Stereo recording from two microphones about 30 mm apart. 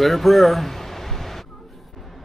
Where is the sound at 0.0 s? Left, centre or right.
Centre.